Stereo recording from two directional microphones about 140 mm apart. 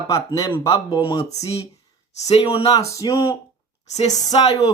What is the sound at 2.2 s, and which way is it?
Speech, 50° left (ahead or behind).